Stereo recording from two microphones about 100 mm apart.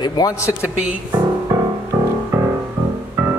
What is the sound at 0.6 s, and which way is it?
Speech, 10° right (ahead or behind).